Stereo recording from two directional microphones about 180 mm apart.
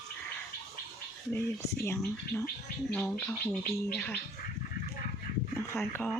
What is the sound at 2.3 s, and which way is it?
Speech, 20° left (ahead or behind).